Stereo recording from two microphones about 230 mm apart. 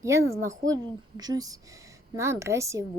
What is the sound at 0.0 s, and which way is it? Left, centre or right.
A woman's voice, centre.